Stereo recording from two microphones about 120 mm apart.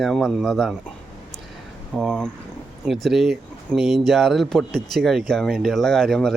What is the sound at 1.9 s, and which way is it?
Speech, 5° left (ahead or behind).